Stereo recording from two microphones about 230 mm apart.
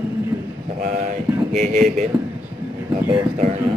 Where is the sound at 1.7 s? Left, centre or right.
Right.